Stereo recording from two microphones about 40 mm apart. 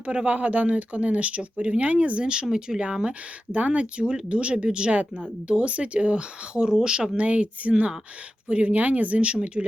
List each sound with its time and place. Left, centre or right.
0.0 s speech: right
2.3 s speech: right
3.5 s speech: right; by 7.1 s centre
7.2 s speech: right